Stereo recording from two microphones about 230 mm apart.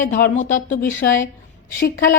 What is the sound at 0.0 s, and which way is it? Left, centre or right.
Speech, left.